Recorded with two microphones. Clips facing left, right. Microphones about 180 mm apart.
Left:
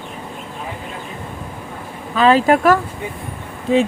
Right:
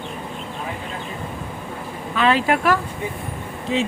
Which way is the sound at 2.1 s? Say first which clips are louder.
Left 6 dB; 40° left (ahead or behind).